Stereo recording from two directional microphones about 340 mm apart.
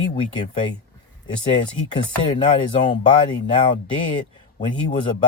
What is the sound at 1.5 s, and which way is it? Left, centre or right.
Speech, centre.